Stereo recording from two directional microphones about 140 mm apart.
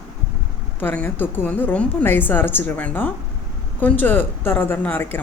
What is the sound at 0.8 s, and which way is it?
Speech, 15° left (ahead or behind).